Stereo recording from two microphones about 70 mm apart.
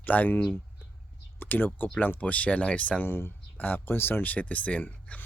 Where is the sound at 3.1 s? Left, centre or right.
Left.